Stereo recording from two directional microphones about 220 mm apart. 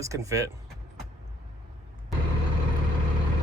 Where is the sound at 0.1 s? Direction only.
15° right (ahead or behind).